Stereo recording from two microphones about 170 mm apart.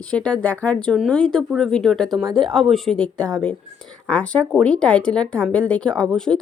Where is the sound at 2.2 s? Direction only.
25° right (ahead or behind).